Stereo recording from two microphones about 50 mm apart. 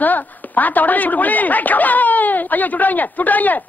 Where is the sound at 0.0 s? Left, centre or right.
Left.